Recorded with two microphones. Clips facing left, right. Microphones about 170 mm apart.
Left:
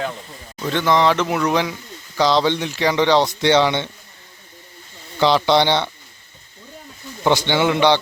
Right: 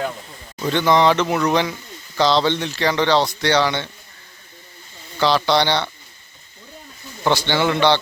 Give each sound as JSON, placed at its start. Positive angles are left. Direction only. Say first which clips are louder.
{"t": 0.6, "sound": "speech", "louder": "right 1 dB", "side_deg": 0}
{"t": 5.2, "sound": "speech", "louder": "left 2 dB", "side_deg": 20}
{"t": 7.3, "sound": "speech", "louder": "left 2 dB", "side_deg": 15}